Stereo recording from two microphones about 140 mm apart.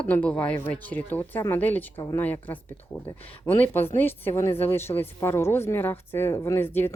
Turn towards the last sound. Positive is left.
turn(degrees=15)  # may be behind; listen again after turning